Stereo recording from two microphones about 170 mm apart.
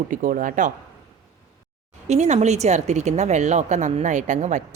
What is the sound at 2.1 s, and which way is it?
Speech, 45° right (ahead or behind).